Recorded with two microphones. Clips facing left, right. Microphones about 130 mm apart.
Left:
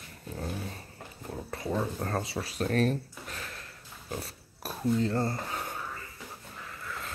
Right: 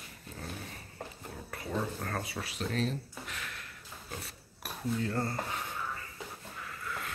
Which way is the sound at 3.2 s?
35° left (ahead or behind).